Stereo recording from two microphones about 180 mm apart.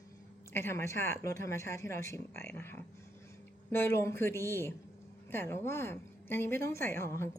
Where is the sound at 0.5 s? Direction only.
15° left (ahead or behind).